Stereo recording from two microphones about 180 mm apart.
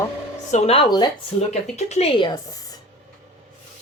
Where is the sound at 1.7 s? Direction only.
35° left (ahead or behind).